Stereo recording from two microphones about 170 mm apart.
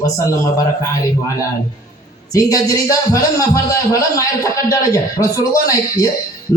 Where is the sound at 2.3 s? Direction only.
20° left (ahead or behind).